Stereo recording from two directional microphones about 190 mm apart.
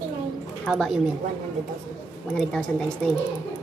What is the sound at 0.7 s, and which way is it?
Speech, centre (ahead or behind).